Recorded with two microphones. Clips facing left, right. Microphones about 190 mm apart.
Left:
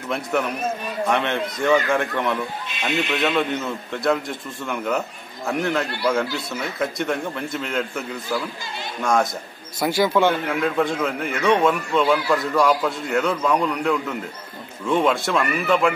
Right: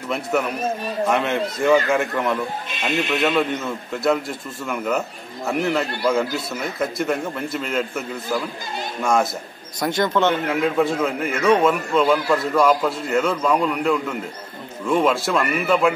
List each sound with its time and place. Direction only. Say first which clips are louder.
0.1 s a man's voice: right 1 dB; 5° right (ahead or behind)
10.5 s a man's voice: right 2 dB; 5° right (ahead or behind)